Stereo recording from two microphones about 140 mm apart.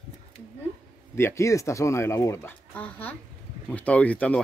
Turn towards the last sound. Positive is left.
turn(degrees=10)  # may be behind; listen again after turning